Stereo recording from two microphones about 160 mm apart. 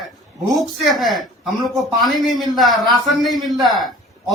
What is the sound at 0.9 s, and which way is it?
Speech, centre (ahead or behind).